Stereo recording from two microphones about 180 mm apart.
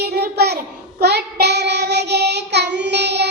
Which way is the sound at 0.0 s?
65° right (ahead or behind).